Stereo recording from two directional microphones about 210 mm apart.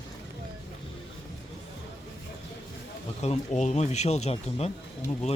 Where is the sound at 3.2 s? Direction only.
30° left (ahead or behind).